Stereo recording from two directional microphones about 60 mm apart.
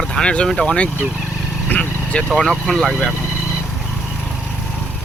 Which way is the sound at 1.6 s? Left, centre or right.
Left.